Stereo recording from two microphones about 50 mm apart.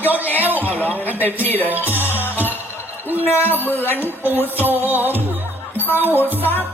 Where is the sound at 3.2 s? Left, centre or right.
Left.